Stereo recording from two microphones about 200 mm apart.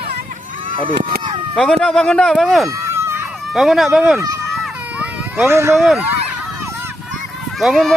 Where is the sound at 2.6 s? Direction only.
15° right (ahead or behind).